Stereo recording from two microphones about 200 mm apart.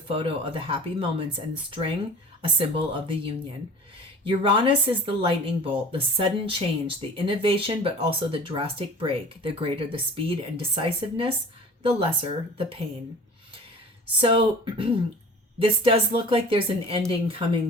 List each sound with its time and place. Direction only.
0.1 s speech: 25° right (ahead or behind)
2.4 s speech: 25° right (ahead or behind)
14.2 s speech: 25° right (ahead or behind)